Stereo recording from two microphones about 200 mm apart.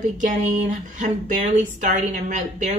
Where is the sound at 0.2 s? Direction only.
40° right (ahead or behind).